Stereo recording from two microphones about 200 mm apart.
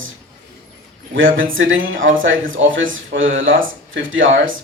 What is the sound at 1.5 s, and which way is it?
Speech, 75° right (ahead or behind).